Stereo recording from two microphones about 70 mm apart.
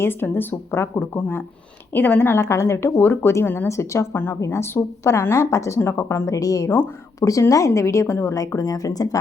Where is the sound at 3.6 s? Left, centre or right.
Left.